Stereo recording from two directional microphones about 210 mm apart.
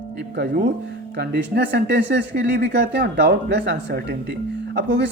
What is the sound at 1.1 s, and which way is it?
Speech, 55° right (ahead or behind).